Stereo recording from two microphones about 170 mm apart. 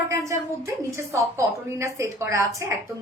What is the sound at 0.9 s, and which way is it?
A woman's voice, 15° right (ahead or behind).